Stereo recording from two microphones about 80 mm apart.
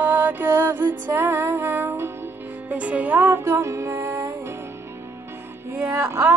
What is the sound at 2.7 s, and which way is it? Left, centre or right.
Music, centre.